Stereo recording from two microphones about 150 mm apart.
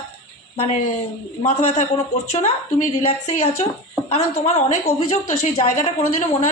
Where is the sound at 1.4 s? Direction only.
50° left (ahead or behind).